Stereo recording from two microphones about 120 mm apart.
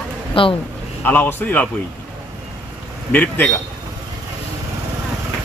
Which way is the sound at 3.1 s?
15° left (ahead or behind).